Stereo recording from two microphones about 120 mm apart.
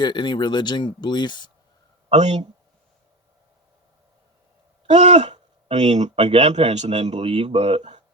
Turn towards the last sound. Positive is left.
turn(degrees=-60)  # may be behind; listen again after turning